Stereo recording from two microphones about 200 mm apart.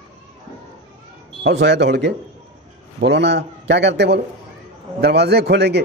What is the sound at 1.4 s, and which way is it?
A man's voice, 55° right (ahead or behind).